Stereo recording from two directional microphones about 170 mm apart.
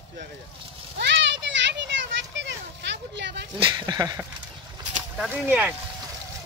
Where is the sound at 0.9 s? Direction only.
90° right.